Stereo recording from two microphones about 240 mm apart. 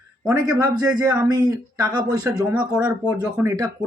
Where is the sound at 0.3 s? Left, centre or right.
Centre.